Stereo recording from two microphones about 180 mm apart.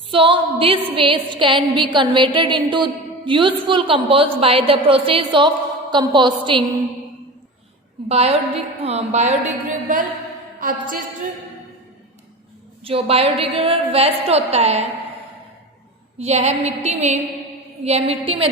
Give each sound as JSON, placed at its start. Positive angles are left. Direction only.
{"t": 0.1, "sound": "a sound", "side_deg": -30}
{"t": 8.0, "sound": "a woman's voice", "side_deg": -35}
{"t": 12.8, "sound": "a woman's voice", "side_deg": -30}
{"t": 16.1, "sound": "a woman's voice", "side_deg": -35}